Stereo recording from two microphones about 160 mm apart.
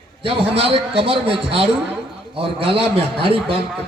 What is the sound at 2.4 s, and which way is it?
A man's voice, 35° right (ahead or behind).